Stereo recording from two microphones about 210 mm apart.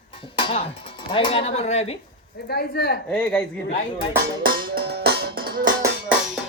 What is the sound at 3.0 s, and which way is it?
Speech, 5° left (ahead or behind).